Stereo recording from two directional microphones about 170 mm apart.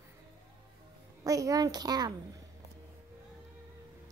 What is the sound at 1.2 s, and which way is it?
Speech, 20° right (ahead or behind).